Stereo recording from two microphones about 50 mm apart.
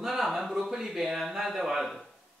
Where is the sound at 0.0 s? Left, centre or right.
Centre.